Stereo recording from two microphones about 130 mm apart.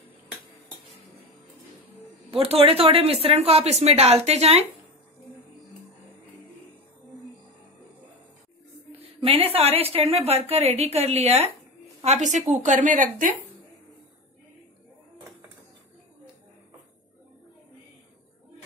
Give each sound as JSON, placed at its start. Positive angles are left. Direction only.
{"t": 2.3, "sound": "speech", "side_deg": -45}
{"t": 9.2, "sound": "a woman's voice", "side_deg": -50}